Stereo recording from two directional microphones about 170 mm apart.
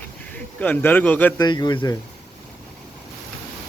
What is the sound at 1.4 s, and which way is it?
Speech, 25° left (ahead or behind).